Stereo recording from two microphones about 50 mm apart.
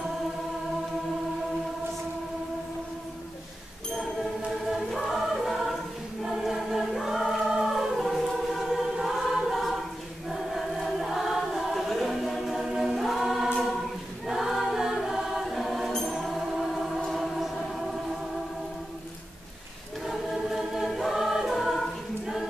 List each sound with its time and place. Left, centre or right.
4.9 s choir: centre
15.5 s music: centre
15.9 s music: centre
16.2 s music: centre
20.1 s choir: centre